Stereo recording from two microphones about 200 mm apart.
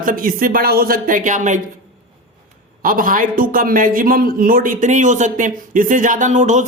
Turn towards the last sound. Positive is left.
turn(degrees=-40)  # may be behind; listen again after turning